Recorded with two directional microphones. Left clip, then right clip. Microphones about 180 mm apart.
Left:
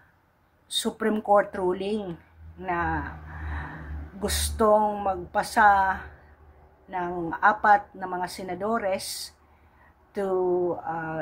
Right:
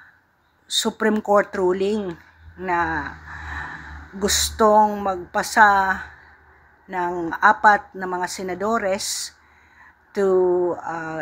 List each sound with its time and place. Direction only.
0.7 s a woman's voice: 20° right (ahead or behind)
2.6 s a sound: 20° right (ahead or behind)
4.2 s a woman's voice: 15° right (ahead or behind)
10.1 s a woman's voice: 15° right (ahead or behind)